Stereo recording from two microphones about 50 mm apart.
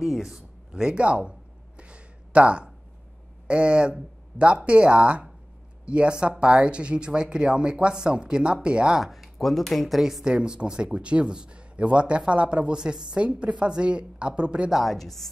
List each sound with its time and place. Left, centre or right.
0.0 s speech: centre
0.4 s speech: centre
1.8 s a sound: right
3.4 s a man's voice: right
9.0 s speech: centre
10.2 s a man's voice: centre
14.9 s speech: centre